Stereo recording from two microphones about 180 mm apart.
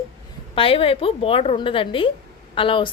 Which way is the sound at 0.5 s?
30° left (ahead or behind).